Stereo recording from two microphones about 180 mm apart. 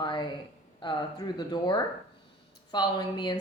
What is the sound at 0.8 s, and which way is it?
Speech, 25° left (ahead or behind).